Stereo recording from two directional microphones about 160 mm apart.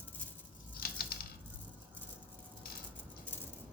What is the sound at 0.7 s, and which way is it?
Typewriter, 70° left (ahead or behind).